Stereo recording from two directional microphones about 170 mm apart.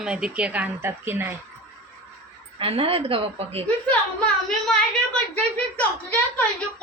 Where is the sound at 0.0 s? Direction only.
5° right (ahead or behind).